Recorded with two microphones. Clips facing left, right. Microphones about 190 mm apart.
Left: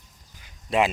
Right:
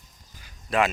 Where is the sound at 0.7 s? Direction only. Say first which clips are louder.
Left 1 dB; 25° left (ahead or behind).